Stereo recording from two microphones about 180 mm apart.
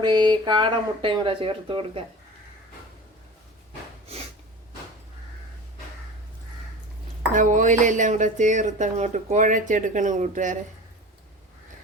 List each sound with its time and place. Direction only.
0.0 s speech: 25° right (ahead or behind)
7.3 s speech: 45° right (ahead or behind)